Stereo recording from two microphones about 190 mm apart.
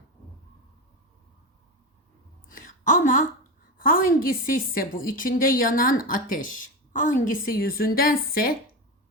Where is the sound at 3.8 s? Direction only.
45° left (ahead or behind).